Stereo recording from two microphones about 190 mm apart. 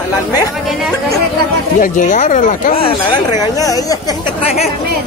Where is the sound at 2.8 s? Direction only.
20° left (ahead or behind).